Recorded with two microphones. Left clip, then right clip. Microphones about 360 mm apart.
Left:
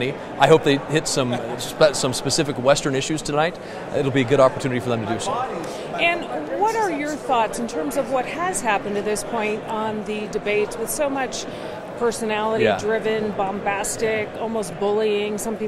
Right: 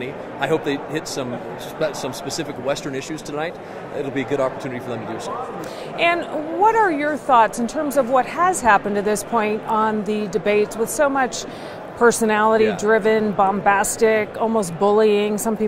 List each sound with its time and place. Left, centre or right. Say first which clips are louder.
0.0 s speech: left 6 dB; left
6.0 s speech: right 3 dB; right
12.0 s speech: right 7 dB; right